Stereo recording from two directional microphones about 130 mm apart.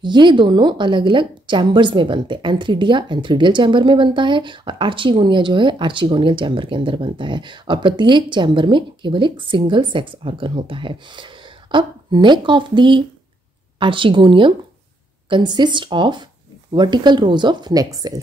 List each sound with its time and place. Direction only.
0.0 s a woman's voice: 35° right (ahead or behind)